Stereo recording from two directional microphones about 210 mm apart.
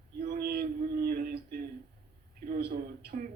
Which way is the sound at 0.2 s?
45° right (ahead or behind).